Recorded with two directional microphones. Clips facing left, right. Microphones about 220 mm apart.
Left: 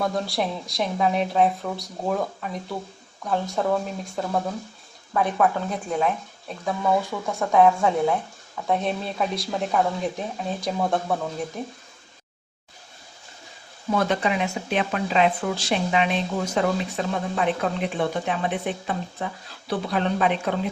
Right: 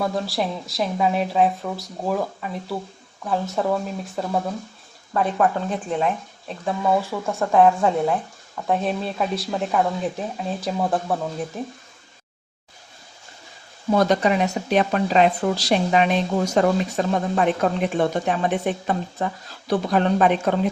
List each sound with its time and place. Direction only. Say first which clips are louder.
0.0 s speech: right 1 dB; centre (ahead or behind)
5.9 s speech: even; centre (ahead or behind)
13.9 s speech: right 5 dB; 40° right (ahead or behind)